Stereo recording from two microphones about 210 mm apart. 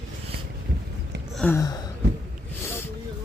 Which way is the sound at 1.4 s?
10° left (ahead or behind).